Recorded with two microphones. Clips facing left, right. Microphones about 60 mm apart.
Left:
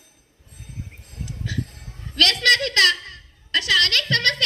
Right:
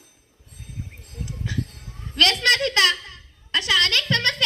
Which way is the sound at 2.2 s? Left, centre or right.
Right.